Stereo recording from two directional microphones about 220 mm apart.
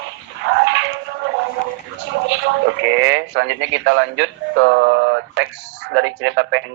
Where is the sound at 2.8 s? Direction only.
55° right (ahead or behind).